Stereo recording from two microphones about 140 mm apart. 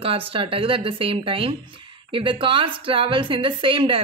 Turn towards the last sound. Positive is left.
turn(degrees=-40)  # may be behind; listen again after turning